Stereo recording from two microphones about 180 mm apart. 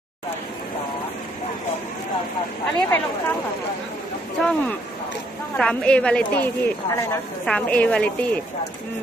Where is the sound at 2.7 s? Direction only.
10° left (ahead or behind).